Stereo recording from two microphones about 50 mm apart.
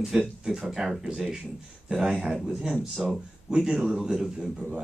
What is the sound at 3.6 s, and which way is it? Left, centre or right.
A man's voice, centre.